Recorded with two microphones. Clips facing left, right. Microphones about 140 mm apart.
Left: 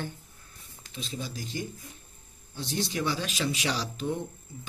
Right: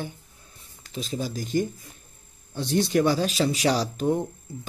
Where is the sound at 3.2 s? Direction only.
35° right (ahead or behind).